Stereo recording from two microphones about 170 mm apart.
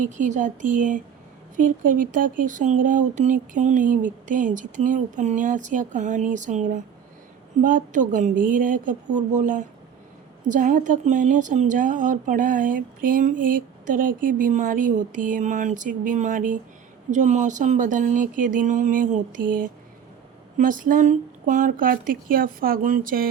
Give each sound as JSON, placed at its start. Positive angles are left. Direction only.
{"t": 0.0, "sound": "a woman's voice", "side_deg": -45}